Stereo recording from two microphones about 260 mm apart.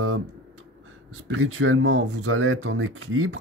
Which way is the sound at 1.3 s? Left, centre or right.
Right.